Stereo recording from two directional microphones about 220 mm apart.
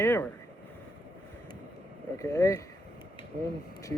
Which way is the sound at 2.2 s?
15° left (ahead or behind).